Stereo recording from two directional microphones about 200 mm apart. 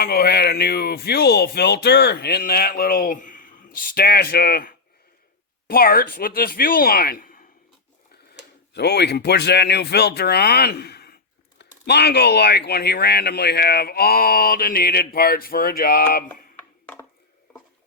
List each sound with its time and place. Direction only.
0.0 s speech: 50° left (ahead or behind)
8.7 s speech: 55° left (ahead or behind)
16.8 s a sound: 10° left (ahead or behind)